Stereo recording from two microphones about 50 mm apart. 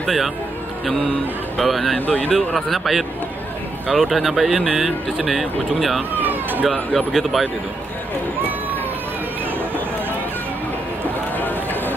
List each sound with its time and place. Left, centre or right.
0.0 s speech: centre
1.6 s speech: centre
2.0 s speech: left
2.3 s speech: centre
6.1 s a sound: right
7.1 s speech: centre
11.3 s run: left